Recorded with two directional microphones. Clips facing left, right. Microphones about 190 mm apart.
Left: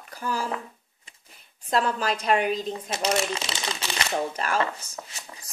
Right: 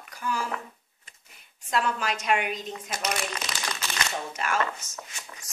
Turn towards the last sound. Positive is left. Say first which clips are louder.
# left 2 dB
turn(degrees=35)  # may be behind; listen again after turning